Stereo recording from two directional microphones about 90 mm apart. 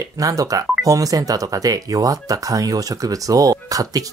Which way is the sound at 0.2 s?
40° right (ahead or behind).